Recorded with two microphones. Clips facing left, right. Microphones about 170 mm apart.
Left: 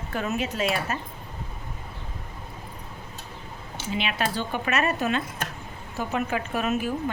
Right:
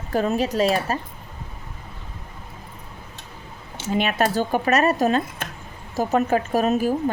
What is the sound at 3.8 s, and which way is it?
Speech, 45° right (ahead or behind).